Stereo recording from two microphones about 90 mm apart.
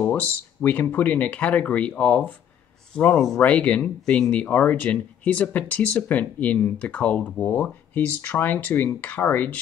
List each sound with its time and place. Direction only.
0.0 s a man's voice: 20° left (ahead or behind)